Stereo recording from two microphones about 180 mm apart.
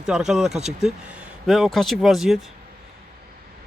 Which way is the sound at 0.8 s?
5° right (ahead or behind).